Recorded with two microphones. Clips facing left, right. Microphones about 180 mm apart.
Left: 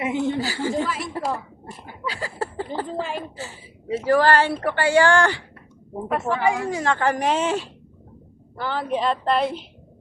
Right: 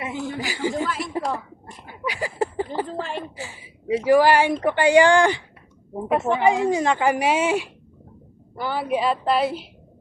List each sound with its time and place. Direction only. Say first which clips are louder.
0.0 s speech: left 6 dB; 20° left (ahead or behind)
0.3 s speech: left 1 dB; 15° right (ahead or behind)
0.8 s speech: left 1 dB; centre (ahead or behind)
2.0 s a sound: right 4 dB; 15° right (ahead or behind)
2.8 s a sound: left 1 dB; centre (ahead or behind)
3.3 s a woman's voice: left 1 dB; 15° right (ahead or behind)